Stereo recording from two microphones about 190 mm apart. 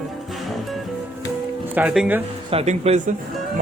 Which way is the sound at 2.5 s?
30° right (ahead or behind).